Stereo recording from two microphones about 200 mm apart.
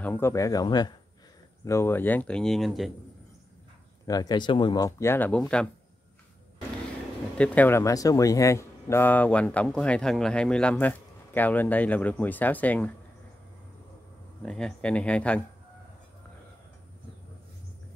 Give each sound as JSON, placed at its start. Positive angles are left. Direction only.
{"t": 0.0, "sound": "speech", "side_deg": 10}
{"t": 4.0, "sound": "speech", "side_deg": 20}
{"t": 7.3, "sound": "speech", "side_deg": 5}
{"t": 14.4, "sound": "speech", "side_deg": 5}